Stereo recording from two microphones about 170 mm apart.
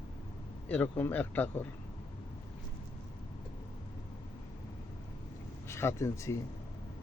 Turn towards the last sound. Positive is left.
turn(degrees=15)  # may be behind; listen again after turning